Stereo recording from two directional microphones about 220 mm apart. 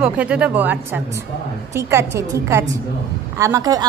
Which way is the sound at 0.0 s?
5° right (ahead or behind).